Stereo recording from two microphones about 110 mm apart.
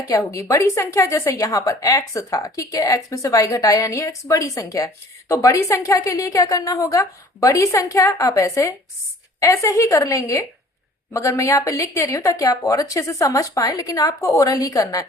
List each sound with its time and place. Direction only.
0.1 s a woman's voice: 25° left (ahead or behind)